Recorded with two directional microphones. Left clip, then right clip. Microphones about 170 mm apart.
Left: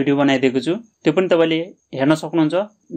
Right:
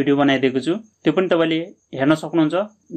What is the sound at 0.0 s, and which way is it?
Speech, 35° left (ahead or behind).